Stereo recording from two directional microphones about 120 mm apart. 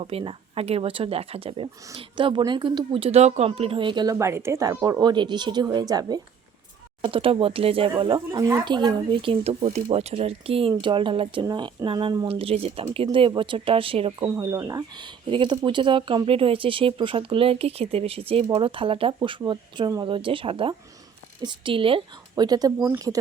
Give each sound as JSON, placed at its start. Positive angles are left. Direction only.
{"t": 0.0, "sound": "speech", "side_deg": -50}
{"t": 4.1, "sound": "speech", "side_deg": -25}
{"t": 7.0, "sound": "speech", "side_deg": -50}
{"t": 11.4, "sound": "speech", "side_deg": -35}
{"t": 14.2, "sound": "speech", "side_deg": -30}
{"t": 22.4, "sound": "speech", "side_deg": -35}